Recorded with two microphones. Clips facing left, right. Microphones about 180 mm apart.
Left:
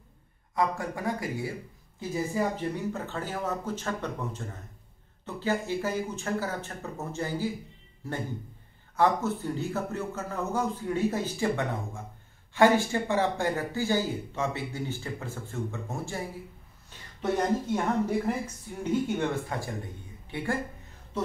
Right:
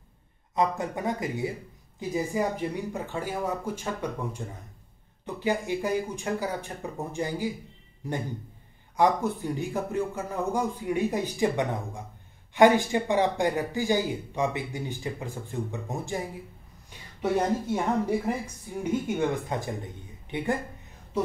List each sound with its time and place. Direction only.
0.6 s speech: 20° right (ahead or behind)
17.2 s speech: 10° right (ahead or behind)